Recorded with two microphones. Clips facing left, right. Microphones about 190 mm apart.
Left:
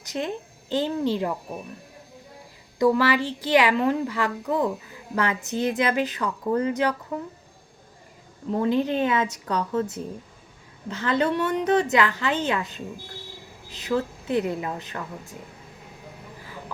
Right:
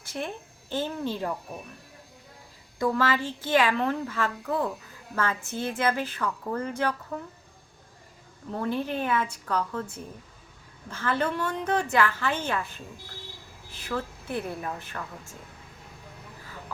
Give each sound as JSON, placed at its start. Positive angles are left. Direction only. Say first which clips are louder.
{"t": 0.0, "sound": "a woman's voice", "louder": "left 5 dB", "side_deg": 20}
{"t": 2.7, "sound": "a woman's voice", "louder": "left 5 dB", "side_deg": 15}
{"t": 8.4, "sound": "a woman's voice", "louder": "left 7 dB", "side_deg": 15}
{"t": 10.8, "sound": "a woman's voice", "louder": "left 4 dB", "side_deg": 15}
{"t": 13.8, "sound": "a woman's voice", "louder": "left 7 dB", "side_deg": 20}